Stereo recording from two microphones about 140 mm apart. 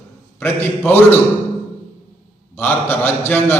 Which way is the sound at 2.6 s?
15° left (ahead or behind).